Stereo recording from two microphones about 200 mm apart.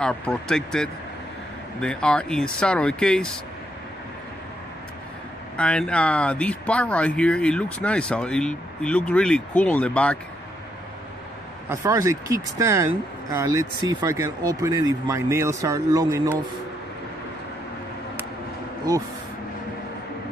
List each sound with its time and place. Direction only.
0.0 s speech: 5° left (ahead or behind)
5.6 s speech: 5° left (ahead or behind)
11.7 s speech: 15° right (ahead or behind)